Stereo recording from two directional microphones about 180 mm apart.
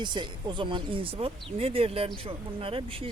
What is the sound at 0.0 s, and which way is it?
Speech, 25° right (ahead or behind).